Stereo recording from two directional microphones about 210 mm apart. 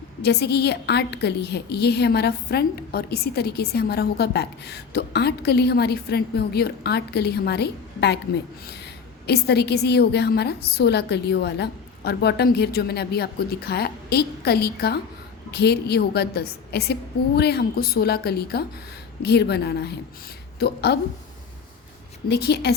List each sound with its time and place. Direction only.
0.2 s a woman's voice: 50° left (ahead or behind)
22.3 s a woman's voice: 50° left (ahead or behind)